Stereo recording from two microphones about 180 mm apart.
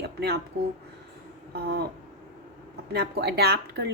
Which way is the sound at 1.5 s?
60° right (ahead or behind).